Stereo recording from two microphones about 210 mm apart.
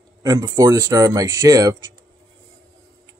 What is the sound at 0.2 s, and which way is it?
Speech, 15° right (ahead or behind).